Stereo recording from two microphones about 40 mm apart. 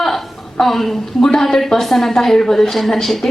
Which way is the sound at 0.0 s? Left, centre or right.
Centre.